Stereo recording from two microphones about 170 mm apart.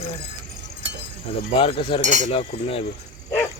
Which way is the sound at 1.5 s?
30° left (ahead or behind).